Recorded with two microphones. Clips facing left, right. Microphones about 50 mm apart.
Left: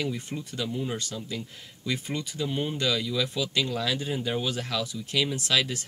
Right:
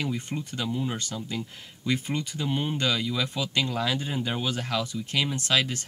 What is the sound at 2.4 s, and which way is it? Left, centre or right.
Speech, right.